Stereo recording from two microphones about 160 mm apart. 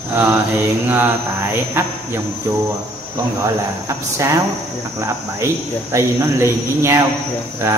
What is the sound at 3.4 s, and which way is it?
Speech, 20° right (ahead or behind).